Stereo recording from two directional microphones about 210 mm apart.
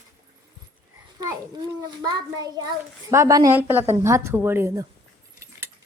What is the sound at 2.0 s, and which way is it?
A child's voice, 20° right (ahead or behind).